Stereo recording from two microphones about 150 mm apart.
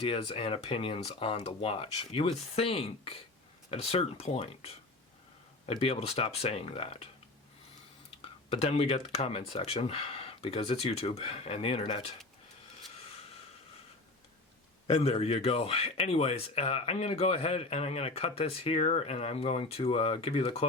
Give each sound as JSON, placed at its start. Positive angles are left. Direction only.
{"t": 0.0, "sound": "speech", "side_deg": 40}
{"t": 8.5, "sound": "speech", "side_deg": 40}
{"t": 14.8, "sound": "speech", "side_deg": 45}